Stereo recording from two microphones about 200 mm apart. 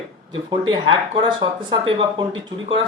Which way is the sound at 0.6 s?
25° right (ahead or behind).